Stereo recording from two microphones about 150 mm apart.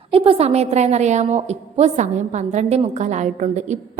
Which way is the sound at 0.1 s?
40° right (ahead or behind).